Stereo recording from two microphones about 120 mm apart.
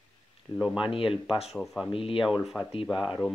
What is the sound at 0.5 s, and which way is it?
Speech, 5° right (ahead or behind).